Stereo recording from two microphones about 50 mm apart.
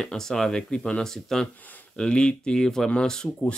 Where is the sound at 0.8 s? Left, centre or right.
Left.